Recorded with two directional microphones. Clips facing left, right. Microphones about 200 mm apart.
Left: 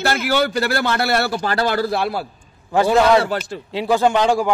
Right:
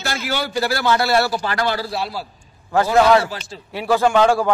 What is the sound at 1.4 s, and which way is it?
Speech, 40° left (ahead or behind).